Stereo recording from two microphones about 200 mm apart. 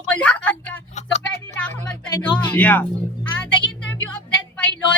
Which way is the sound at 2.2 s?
10° left (ahead or behind).